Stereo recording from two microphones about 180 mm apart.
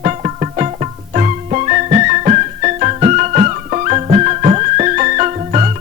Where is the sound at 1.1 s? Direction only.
40° right (ahead or behind).